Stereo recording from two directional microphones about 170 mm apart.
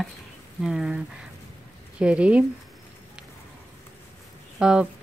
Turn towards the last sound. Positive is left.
turn(degrees=-5)  # may be behind; listen again after turning